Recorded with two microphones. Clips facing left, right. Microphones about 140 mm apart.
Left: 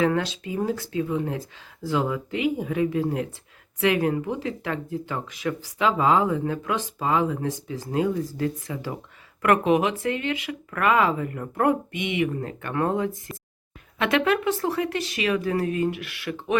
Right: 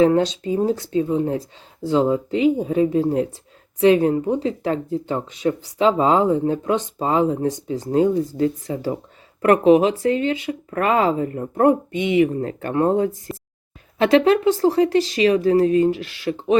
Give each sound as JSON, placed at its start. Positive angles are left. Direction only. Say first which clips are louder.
{"t": 0.0, "sound": "speech", "louder": "right 7 dB", "side_deg": -30}